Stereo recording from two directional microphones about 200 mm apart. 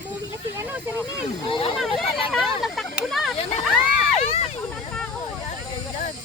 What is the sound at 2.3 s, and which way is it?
Speech, centre (ahead or behind).